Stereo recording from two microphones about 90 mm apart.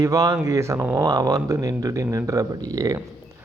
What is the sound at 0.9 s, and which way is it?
Speech, 45° right (ahead or behind).